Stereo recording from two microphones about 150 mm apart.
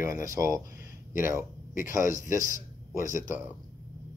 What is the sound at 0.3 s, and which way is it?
Speech, 20° right (ahead or behind).